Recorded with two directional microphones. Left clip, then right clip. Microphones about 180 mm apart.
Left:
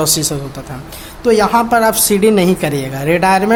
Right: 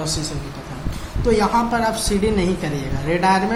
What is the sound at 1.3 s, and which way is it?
A woman's voice, 50° left (ahead or behind).